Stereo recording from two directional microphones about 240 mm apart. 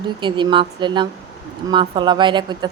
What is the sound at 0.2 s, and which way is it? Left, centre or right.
A woman's voice, centre.